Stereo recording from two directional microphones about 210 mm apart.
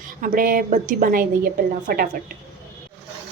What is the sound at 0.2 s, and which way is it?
A woman's voice, 40° right (ahead or behind).